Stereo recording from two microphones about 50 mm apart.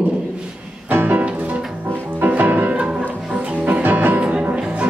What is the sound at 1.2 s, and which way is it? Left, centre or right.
Music, right.